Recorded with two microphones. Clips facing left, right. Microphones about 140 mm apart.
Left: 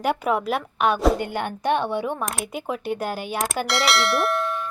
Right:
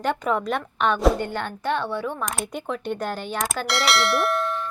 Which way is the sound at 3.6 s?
Centre (ahead or behind).